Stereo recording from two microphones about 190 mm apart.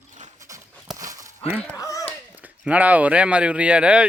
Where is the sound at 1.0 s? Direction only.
15° right (ahead or behind).